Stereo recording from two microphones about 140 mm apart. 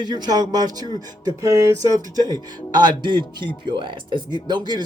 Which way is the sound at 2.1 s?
30° right (ahead or behind).